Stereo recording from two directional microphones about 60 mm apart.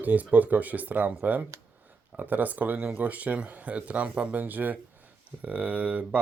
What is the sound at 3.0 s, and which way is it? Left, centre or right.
Speech, right.